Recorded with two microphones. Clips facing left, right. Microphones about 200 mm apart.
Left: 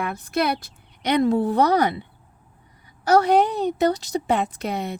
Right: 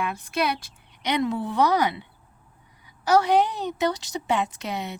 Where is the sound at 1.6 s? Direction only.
55° left (ahead or behind).